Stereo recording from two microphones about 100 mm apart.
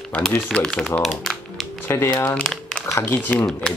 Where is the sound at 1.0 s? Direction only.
Centre (ahead or behind).